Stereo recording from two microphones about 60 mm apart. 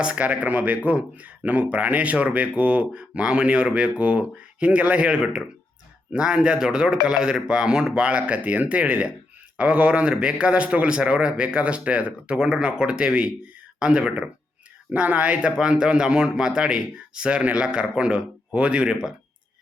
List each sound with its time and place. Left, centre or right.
0.0 s speech: centre
14.9 s speech: right
15.4 s speech: centre